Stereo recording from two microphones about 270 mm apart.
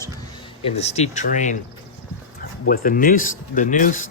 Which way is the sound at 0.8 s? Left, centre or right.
Left.